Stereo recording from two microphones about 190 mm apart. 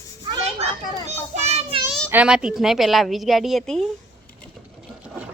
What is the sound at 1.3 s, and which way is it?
Speech, 35° right (ahead or behind).